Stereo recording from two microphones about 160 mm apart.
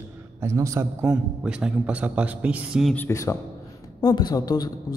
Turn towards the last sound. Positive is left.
turn(degrees=25)  # may be behind; listen again after turning